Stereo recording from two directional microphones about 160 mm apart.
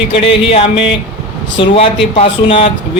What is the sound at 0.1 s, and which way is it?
A man's voice, 35° left (ahead or behind).